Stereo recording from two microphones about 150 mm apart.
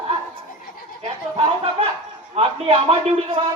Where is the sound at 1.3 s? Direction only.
40° right (ahead or behind).